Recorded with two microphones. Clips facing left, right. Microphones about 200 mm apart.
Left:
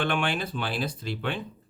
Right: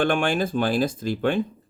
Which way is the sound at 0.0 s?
45° right (ahead or behind).